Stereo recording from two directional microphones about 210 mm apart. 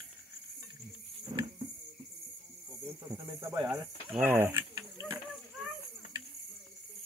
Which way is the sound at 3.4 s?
20° right (ahead or behind).